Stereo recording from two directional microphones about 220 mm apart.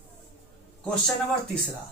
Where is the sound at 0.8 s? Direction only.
5° left (ahead or behind).